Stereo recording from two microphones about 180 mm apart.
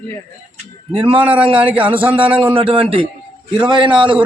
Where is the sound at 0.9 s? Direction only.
30° right (ahead or behind).